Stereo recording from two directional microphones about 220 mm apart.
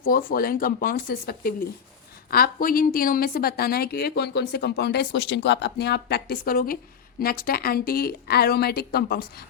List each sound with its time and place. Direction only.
0.0 s a woman's voice: 40° left (ahead or behind)